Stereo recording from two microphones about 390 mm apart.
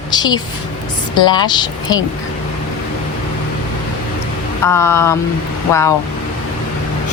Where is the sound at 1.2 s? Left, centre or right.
Centre.